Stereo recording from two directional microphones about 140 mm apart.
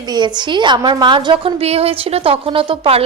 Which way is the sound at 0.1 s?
30° right (ahead or behind).